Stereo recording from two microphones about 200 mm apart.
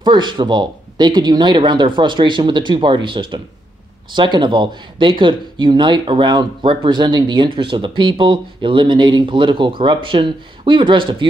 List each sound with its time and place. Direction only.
0.0 s speech: 25° right (ahead or behind)